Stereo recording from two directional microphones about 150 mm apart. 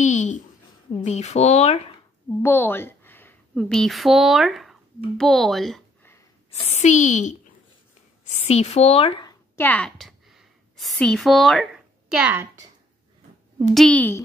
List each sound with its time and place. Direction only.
0.0 s a sound: 50° left (ahead or behind)
1.0 s speech: 50° left (ahead or behind)
2.4 s a sound: 15° left (ahead or behind)
3.5 s a child's voice: 5° left (ahead or behind)
6.7 s speech: 50° left (ahead or behind)
8.5 s speech: 45° left (ahead or behind)
9.6 s a woman's voice: 10° left (ahead or behind); by 12.4 s 10° right (ahead or behind)
13.7 s a woman's voice: 10° left (ahead or behind)